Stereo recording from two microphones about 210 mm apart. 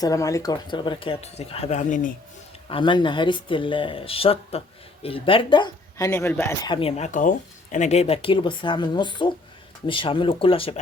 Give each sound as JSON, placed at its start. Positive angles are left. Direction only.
{"t": 0.0, "sound": "speech", "side_deg": 15}
{"t": 2.6, "sound": "speech", "side_deg": 25}
{"t": 6.1, "sound": "speech", "side_deg": 10}